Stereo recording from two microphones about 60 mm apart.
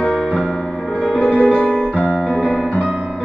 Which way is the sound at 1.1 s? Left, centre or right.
Left.